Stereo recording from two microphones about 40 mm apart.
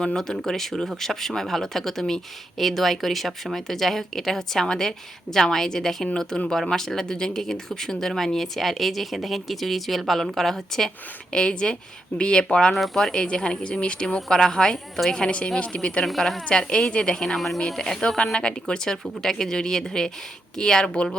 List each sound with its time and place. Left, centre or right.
0.2 s speech: centre
11.3 s speech: left
12.7 s speech: centre
13.2 s speech: left
14.3 s speech: centre
15.6 s speech: left
16.0 s speech: centre
16.5 s speech: left
17.2 s speech: centre
18.3 s speech: left